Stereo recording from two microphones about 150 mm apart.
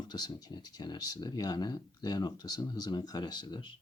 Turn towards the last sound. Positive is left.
turn(degrees=30)  # may be behind; listen again after turning